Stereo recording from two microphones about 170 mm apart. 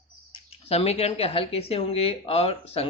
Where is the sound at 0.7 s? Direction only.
35° left (ahead or behind).